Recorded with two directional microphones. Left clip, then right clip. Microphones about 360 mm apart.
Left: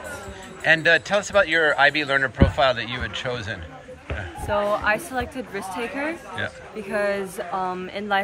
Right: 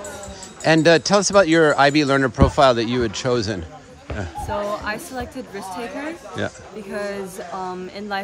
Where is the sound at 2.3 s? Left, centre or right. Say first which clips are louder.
Right 5 dB; centre.